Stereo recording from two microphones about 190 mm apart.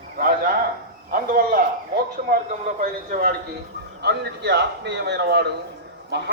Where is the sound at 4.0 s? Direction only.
60° right (ahead or behind).